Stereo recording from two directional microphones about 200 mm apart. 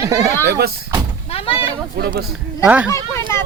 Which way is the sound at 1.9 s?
50° right (ahead or behind).